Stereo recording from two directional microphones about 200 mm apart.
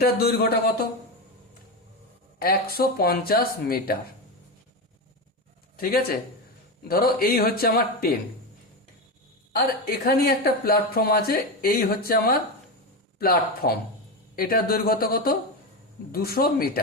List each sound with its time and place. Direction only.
0.0 s a woman's voice: 50° left (ahead or behind)
2.4 s a woman's voice: 50° left (ahead or behind)
5.7 s a woman's voice: 50° left (ahead or behind)
9.5 s a woman's voice: 50° left (ahead or behind)